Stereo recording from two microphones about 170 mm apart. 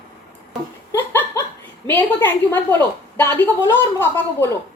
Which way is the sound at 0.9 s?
20° left (ahead or behind).